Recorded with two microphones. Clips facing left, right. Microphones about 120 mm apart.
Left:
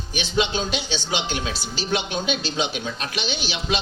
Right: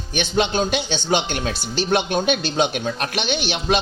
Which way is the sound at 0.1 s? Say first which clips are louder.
Right 3 dB; 55° right (ahead or behind).